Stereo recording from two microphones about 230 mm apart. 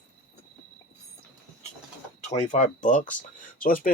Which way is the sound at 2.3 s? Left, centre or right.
Left.